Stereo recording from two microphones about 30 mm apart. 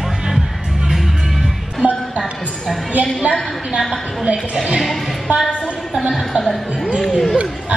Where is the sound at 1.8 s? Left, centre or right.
Right.